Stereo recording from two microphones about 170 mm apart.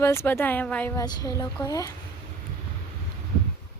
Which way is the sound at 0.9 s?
25° left (ahead or behind).